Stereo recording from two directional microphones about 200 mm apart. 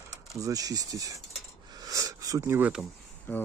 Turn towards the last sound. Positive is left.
turn(degrees=10)  # may be behind; listen again after turning